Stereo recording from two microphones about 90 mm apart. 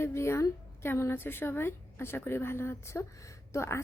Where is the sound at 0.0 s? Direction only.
30° left (ahead or behind).